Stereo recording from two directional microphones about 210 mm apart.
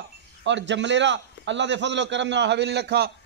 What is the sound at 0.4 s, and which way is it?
A man's voice, 60° right (ahead or behind).